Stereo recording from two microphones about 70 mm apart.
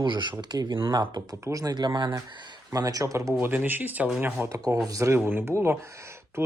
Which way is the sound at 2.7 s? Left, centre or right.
Right.